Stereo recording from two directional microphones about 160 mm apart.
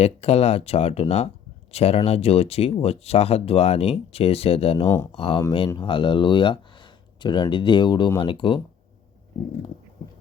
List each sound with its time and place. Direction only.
0.0 s speech: 40° left (ahead or behind)